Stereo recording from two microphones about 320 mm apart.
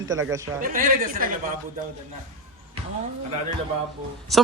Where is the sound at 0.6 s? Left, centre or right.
Right.